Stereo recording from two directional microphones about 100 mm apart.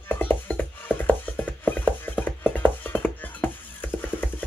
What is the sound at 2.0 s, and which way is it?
Music, 15° left (ahead or behind).